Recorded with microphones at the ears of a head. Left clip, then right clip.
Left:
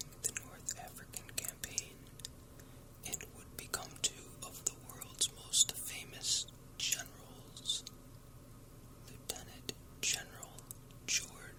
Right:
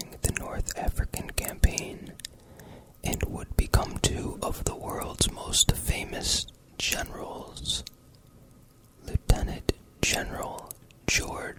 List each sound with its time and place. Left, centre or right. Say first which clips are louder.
0.0 s whispering: right 11 dB; right
9.0 s whispering: right 15 dB; right